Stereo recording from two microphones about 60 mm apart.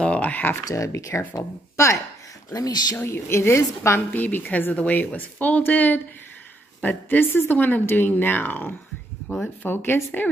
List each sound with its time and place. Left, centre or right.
0.0 s a sound: left
0.7 s speech: left
2.5 s speech: left
3.1 s a woman's voice: left
4.1 s a woman's voice: left